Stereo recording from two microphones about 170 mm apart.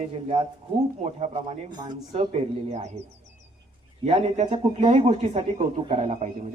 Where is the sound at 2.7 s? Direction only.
40° right (ahead or behind).